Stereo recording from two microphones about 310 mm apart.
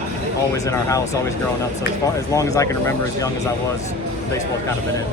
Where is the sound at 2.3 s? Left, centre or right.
Centre.